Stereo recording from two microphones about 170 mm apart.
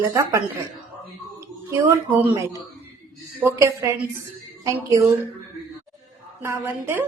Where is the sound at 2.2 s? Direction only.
20° right (ahead or behind).